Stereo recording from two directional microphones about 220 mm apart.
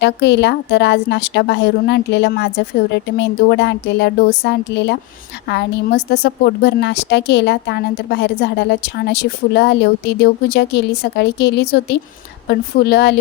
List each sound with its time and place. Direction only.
0.0 s a woman's voice: 50° left (ahead or behind)